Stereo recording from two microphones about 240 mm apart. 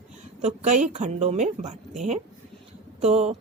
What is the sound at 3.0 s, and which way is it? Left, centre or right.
Speech, right.